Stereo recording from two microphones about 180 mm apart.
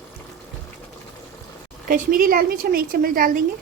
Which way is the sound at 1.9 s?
50° right (ahead or behind).